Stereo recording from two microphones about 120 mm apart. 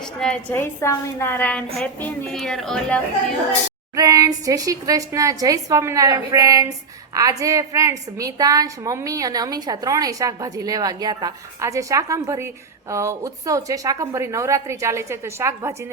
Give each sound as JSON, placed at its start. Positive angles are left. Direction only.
{"t": 0.2, "sound": "a woman's voice", "side_deg": 5}
{"t": 0.5, "sound": "a woman's voice", "side_deg": 20}
{"t": 3.9, "sound": "a woman's voice", "side_deg": -30}